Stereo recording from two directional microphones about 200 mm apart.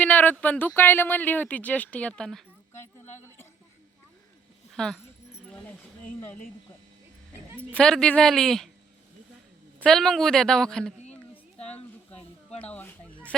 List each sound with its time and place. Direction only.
0.0 s speech: 10° left (ahead or behind)
4.7 s a sound: centre (ahead or behind)
7.6 s a woman's voice: 5° left (ahead or behind)
9.8 s a woman's voice: centre (ahead or behind)
12.1 s snake: 30° left (ahead or behind)
12.7 s speech: 10° left (ahead or behind)